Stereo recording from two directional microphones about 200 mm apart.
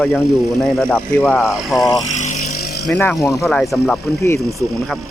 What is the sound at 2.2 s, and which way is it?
Vehicle, 35° left (ahead or behind).